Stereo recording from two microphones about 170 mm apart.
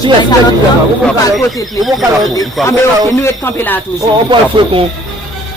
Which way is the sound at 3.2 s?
15° left (ahead or behind).